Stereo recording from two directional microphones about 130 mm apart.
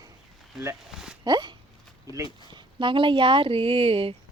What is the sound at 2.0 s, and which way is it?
Speech, 25° right (ahead or behind).